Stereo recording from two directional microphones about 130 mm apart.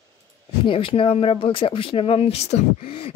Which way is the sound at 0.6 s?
40° left (ahead or behind).